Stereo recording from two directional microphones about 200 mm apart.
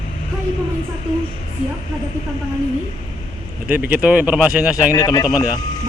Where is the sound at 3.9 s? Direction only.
5° right (ahead or behind).